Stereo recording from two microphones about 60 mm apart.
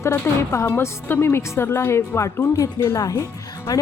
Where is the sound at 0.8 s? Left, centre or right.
Left.